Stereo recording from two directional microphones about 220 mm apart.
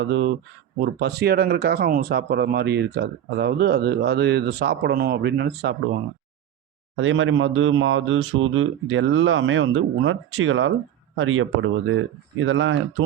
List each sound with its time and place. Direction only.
0.0 s speech: 55° right (ahead or behind)
6.9 s speech: 60° right (ahead or behind)